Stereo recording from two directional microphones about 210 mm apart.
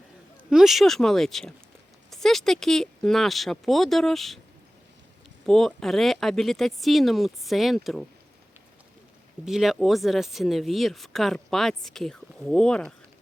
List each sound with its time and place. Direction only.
0.5 s speech: centre (ahead or behind)
5.5 s speech: centre (ahead or behind)
9.5 s speech: centre (ahead or behind)